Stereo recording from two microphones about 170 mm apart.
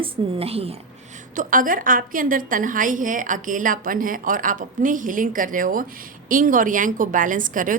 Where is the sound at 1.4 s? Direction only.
50° right (ahead or behind).